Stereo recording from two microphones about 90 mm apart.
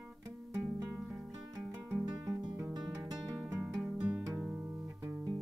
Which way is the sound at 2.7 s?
50° right (ahead or behind).